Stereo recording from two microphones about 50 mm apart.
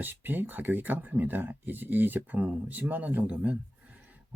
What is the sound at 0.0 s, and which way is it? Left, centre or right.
Speech, right.